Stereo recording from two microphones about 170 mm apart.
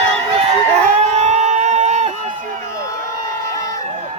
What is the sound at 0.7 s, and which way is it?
Crowd, 40° right (ahead or behind).